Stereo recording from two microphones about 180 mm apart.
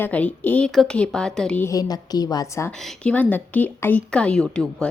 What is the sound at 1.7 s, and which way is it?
A woman's voice, 20° left (ahead or behind).